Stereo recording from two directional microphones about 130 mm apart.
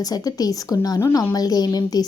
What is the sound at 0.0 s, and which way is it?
A woman's voice, 30° left (ahead or behind).